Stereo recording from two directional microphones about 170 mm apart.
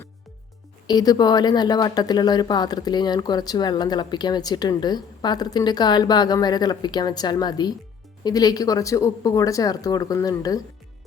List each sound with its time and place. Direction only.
0.9 s a woman's voice: 25° left (ahead or behind)